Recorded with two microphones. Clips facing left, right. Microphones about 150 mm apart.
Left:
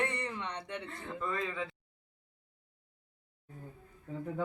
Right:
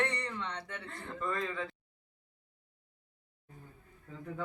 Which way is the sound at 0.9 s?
Centre (ahead or behind).